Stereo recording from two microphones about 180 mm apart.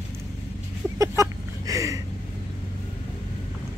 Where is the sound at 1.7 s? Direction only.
20° right (ahead or behind).